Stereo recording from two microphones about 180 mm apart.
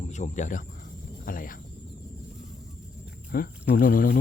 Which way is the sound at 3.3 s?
55° left (ahead or behind).